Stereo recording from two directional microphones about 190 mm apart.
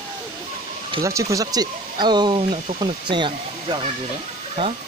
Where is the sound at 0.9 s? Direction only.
15° right (ahead or behind).